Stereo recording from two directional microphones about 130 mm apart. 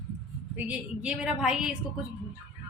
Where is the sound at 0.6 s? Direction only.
5° right (ahead or behind).